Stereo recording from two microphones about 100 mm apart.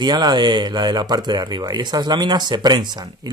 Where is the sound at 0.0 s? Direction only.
45° right (ahead or behind).